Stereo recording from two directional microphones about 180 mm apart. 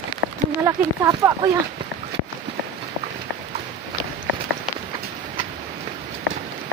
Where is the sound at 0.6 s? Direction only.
20° right (ahead or behind).